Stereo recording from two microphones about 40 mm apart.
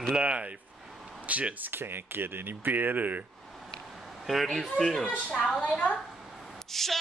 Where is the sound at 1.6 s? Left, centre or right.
Right.